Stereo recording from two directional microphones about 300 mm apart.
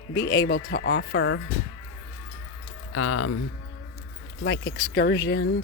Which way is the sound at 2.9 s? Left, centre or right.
Left.